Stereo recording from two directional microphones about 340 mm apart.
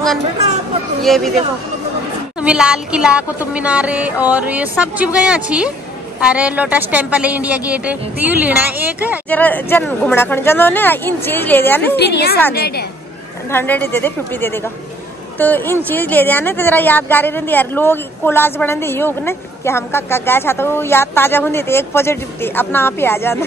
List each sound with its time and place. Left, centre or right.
1.0 s speech: centre
2.4 s speech: centre
12.0 s a woman's voice: left
13.5 s speech: centre